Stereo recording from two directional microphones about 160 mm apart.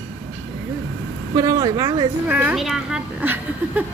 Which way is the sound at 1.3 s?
20° right (ahead or behind).